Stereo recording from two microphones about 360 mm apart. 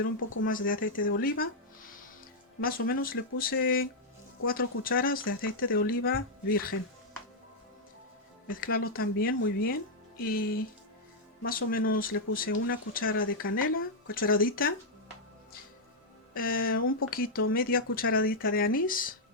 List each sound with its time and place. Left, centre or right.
0.3 s speech: left
2.6 s speech: left
8.4 s speech: left
16.3 s speech: left